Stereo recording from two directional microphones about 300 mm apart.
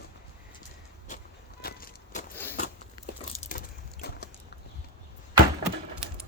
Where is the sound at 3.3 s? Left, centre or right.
Left.